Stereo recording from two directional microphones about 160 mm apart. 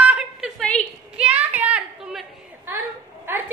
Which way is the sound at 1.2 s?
10° right (ahead or behind).